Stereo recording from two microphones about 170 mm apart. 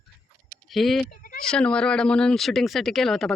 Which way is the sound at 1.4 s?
5° left (ahead or behind).